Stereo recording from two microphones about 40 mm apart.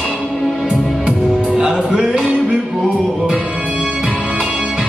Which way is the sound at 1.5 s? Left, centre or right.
Centre.